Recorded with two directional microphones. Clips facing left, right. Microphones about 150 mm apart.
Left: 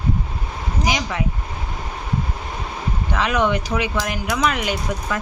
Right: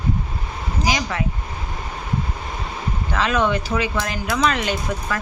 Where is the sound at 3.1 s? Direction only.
15° left (ahead or behind).